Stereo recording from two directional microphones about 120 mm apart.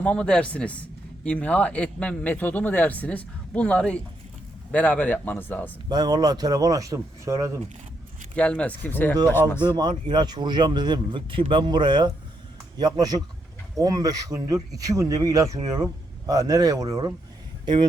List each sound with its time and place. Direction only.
0.0 s a man's voice: 10° left (ahead or behind)
5.9 s speech: 35° right (ahead or behind)
8.4 s a man's voice: 10° left (ahead or behind)
10.1 s speech: 35° right (ahead or behind)